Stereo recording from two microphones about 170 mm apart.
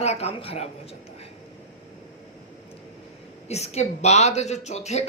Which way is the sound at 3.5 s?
40° left (ahead or behind).